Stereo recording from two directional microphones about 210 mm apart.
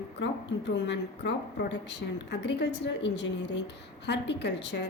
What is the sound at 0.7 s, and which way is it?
A woman's voice, 55° left (ahead or behind).